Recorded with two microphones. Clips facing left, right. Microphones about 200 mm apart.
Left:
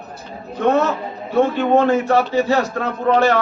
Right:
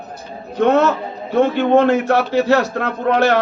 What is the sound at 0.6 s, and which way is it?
A man's voice, 70° right (ahead or behind).